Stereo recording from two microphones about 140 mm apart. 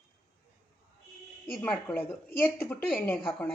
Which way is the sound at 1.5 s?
5° left (ahead or behind).